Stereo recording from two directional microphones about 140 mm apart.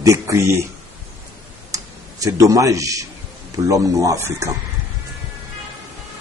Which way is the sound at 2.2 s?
25° right (ahead or behind).